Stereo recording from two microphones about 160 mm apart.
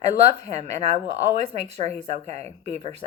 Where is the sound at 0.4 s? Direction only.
40° right (ahead or behind).